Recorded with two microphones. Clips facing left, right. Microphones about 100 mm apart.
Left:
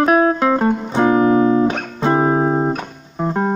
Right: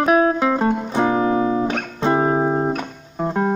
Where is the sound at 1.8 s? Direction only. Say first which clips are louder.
Left 2 dB; 10° left (ahead or behind).